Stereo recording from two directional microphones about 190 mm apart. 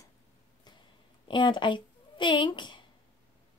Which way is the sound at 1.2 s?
25° left (ahead or behind).